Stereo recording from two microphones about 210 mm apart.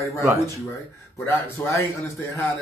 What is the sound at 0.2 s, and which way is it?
Speech, 15° right (ahead or behind).